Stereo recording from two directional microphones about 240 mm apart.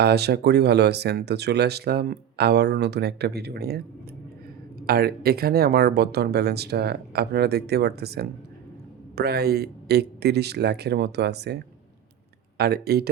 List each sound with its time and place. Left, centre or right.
0.0 s speech: right
4.9 s speech: right